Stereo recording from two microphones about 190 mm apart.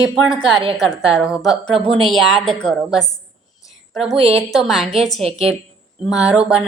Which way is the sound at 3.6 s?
Centre (ahead or behind).